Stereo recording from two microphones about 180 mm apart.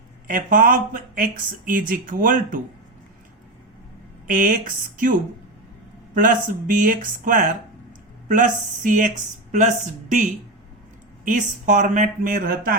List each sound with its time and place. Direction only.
0.3 s speech: 50° right (ahead or behind)
4.3 s speech: 45° right (ahead or behind)
6.1 s speech: 45° right (ahead or behind)
11.3 s speech: 45° right (ahead or behind)